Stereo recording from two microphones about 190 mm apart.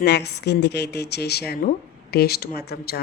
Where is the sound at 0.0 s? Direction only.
60° left (ahead or behind).